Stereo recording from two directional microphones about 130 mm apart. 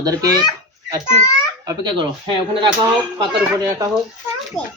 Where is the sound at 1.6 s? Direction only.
30° right (ahead or behind).